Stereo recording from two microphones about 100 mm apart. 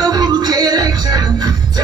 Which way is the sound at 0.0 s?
40° right (ahead or behind).